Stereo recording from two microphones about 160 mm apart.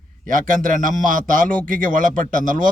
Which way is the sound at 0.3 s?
55° right (ahead or behind).